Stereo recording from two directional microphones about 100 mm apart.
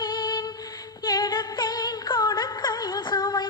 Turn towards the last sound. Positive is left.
turn(degrees=45)  # may be behind; listen again after turning